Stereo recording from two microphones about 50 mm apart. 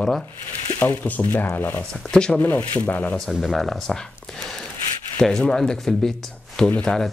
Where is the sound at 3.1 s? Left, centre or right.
Centre.